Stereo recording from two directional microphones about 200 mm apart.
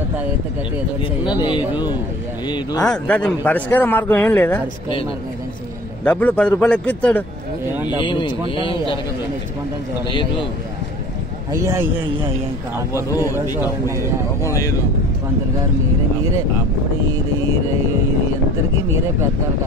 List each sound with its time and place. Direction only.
1.3 s speech: 25° left (ahead or behind)
2.8 s a man's voice: 5° left (ahead or behind)
6.0 s a man's voice: 5° left (ahead or behind)
8.0 s speech: 25° left (ahead or behind)
11.5 s speech: 15° right (ahead or behind)
12.9 s a man's voice: 15° left (ahead or behind)